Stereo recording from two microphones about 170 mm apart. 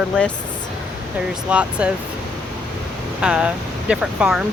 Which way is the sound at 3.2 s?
5° right (ahead or behind).